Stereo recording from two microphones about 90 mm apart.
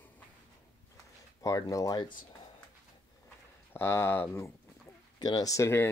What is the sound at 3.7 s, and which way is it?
Speech, 25° left (ahead or behind).